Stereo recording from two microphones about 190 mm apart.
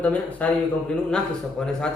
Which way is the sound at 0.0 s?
5° left (ahead or behind).